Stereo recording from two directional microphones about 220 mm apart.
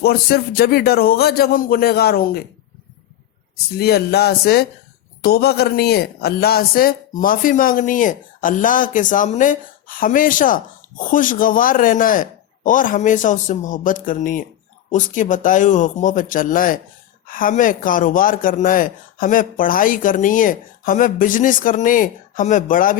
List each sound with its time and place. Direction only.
0.0 s a man's voice: 45° left (ahead or behind)
3.7 s a man's voice: 45° left (ahead or behind)